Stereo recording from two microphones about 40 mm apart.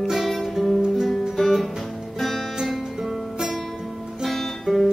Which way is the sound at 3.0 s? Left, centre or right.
Centre.